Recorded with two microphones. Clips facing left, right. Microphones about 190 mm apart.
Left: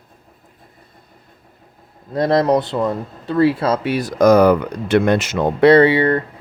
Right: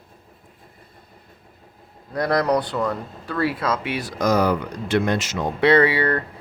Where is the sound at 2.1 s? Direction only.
25° left (ahead or behind); by 5.6 s 60° left (ahead or behind).